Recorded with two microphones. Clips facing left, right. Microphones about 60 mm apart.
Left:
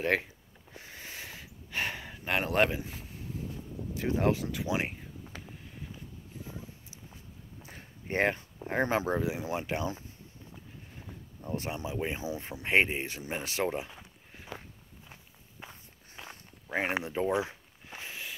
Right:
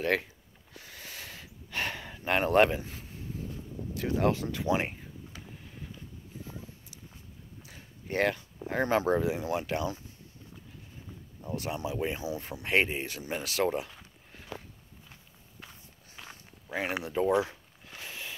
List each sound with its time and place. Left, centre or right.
0.0 s speech: centre
0.7 s a sound: left; by 2.8 s centre
3.9 s speech: centre
4.4 s speech: centre
8.1 s speech: left
11.5 s speech: left
13.9 s a sound: centre
15.6 s walk: left
16.2 s walk: centre
16.7 s speech: left
17.1 s a sound: centre